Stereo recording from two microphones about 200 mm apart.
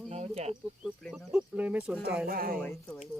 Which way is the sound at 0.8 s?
Centre (ahead or behind).